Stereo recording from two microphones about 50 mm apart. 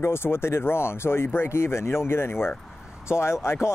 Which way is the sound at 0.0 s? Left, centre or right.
Left.